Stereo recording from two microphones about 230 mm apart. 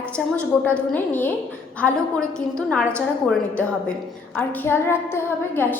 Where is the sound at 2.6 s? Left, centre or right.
Centre.